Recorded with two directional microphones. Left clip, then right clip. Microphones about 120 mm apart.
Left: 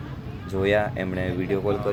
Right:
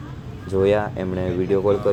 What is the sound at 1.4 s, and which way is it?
Speech, 20° right (ahead or behind).